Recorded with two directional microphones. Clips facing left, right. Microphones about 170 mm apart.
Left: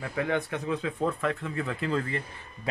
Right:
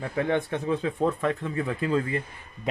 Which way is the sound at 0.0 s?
30° right (ahead or behind).